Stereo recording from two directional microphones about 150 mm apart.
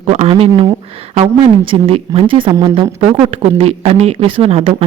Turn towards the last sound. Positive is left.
turn(degrees=-40)  # may be behind; listen again after turning